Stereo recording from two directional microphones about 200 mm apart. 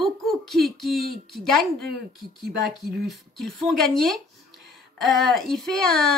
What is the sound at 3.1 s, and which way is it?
Speech, centre (ahead or behind).